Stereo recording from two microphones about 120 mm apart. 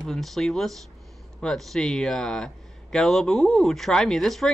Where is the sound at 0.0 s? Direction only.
Centre (ahead or behind).